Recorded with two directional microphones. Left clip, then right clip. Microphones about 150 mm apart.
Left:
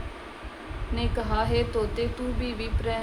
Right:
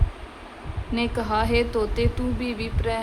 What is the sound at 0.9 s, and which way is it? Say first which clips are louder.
A woman's voice: right 4 dB; 35° right (ahead or behind).